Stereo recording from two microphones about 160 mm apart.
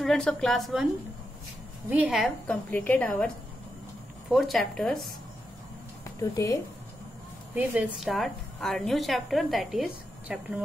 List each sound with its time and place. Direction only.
0.0 s a woman's voice: 5° left (ahead or behind)
1.9 s a woman's voice: 5° right (ahead or behind)
2.4 s a woman's voice: 10° left (ahead or behind)
4.3 s a woman's voice: centre (ahead or behind)
6.3 s speech: 20° left (ahead or behind)
7.5 s a woman's voice: 10° right (ahead or behind)
8.1 s a woman's voice: centre (ahead or behind)